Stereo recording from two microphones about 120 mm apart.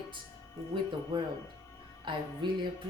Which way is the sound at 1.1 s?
40° right (ahead or behind).